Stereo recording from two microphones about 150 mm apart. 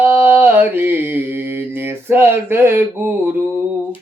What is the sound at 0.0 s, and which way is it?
Mantra, 15° right (ahead or behind).